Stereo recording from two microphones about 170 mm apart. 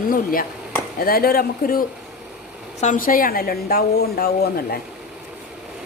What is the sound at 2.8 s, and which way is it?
A woman's voice, 50° left (ahead or behind).